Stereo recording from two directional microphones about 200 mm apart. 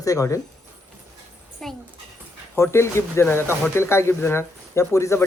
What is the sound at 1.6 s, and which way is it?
Child singing, centre (ahead or behind).